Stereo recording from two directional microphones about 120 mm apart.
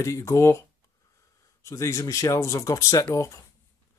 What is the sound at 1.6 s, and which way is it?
Speech, 25° left (ahead or behind).